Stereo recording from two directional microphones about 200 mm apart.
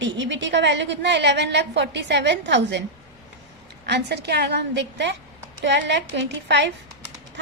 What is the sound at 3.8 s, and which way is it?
A woman's voice, 55° right (ahead or behind).